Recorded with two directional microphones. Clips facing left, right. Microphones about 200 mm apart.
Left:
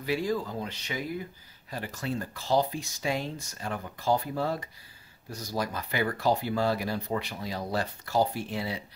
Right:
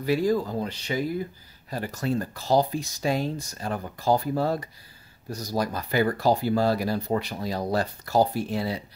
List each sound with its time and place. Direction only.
0.0 s speech: 40° right (ahead or behind)